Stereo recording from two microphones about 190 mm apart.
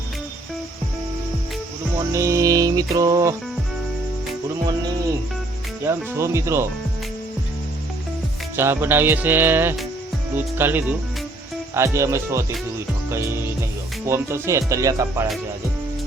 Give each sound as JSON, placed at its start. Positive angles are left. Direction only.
{"t": 2.1, "sound": "music", "side_deg": -15}
{"t": 5.8, "sound": "speech", "side_deg": -15}
{"t": 8.5, "sound": "speech", "side_deg": -10}
{"t": 13.1, "sound": "music", "side_deg": -15}